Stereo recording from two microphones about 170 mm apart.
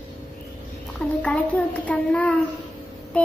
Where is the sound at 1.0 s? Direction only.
5° left (ahead or behind).